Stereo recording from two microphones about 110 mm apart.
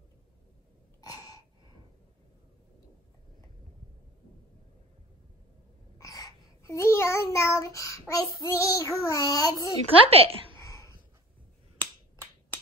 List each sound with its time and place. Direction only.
1.0 s gasp: 35° left (ahead or behind)
5.9 s a sound: 30° left (ahead or behind)
8.1 s a child's voice: 25° left (ahead or behind)
10.0 s a woman's voice: 60° right (ahead or behind)
10.6 s a sound: 30° left (ahead or behind)
11.8 s finger snapping: 15° left (ahead or behind)